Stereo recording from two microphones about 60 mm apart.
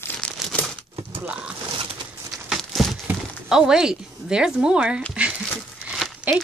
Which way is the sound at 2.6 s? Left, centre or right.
Centre.